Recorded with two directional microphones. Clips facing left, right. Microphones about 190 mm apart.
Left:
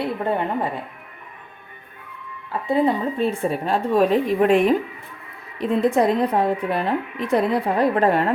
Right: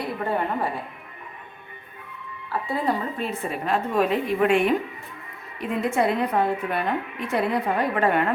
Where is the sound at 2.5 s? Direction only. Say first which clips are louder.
Left 6 dB; 25° left (ahead or behind).